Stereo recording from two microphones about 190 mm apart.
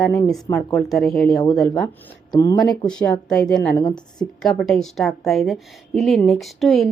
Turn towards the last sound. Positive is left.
turn(degrees=0)  # may be behind; listen again after turning